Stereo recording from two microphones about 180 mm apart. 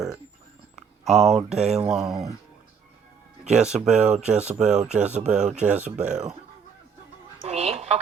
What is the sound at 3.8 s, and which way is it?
Speech, 5° right (ahead or behind).